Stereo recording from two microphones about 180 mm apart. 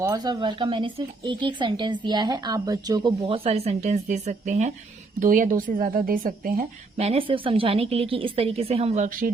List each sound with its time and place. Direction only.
0.1 s a woman's voice: 25° right (ahead or behind); by 6.7 s 50° right (ahead or behind)
6.9 s a woman's voice: 35° right (ahead or behind)